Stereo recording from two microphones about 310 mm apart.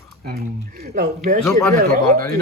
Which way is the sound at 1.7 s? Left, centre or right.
Right.